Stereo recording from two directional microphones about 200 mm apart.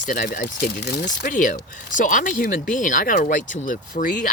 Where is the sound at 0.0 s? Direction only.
45° left (ahead or behind).